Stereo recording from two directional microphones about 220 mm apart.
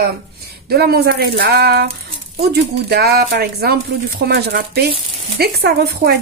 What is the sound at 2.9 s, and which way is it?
Speech, 45° right (ahead or behind).